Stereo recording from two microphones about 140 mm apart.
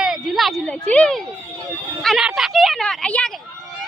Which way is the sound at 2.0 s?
Centre (ahead or behind).